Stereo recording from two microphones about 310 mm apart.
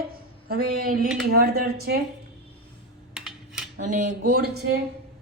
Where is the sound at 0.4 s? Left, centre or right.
Right.